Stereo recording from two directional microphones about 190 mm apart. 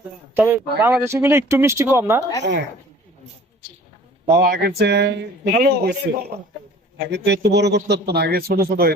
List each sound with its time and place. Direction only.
0.3 s speech: 10° right (ahead or behind)
2.4 s a woman's voice: 70° right (ahead or behind)
4.4 s speech: 50° right (ahead or behind)
5.5 s a man's voice: 45° right (ahead or behind)